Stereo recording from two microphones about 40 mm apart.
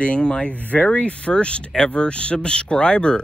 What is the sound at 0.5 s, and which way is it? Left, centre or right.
Speech, left.